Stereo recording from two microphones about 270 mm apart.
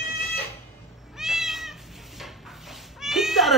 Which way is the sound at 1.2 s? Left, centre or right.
Centre.